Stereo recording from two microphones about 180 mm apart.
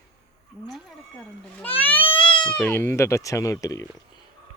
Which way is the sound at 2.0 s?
30° left (ahead or behind).